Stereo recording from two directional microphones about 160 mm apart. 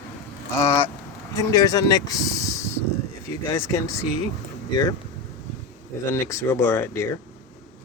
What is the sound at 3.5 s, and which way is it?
A man's voice, 15° left (ahead or behind).